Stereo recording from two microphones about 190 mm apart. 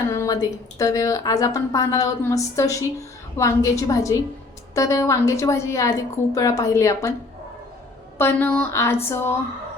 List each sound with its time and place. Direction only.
0.1 s a sound: 15° left (ahead or behind)
0.8 s a woman's voice: 15° left (ahead or behind)
8.2 s a woman's voice: 10° left (ahead or behind)